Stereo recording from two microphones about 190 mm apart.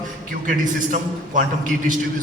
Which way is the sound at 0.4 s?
45° right (ahead or behind).